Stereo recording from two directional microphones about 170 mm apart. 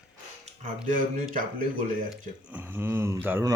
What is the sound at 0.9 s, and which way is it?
Speech, 50° right (ahead or behind).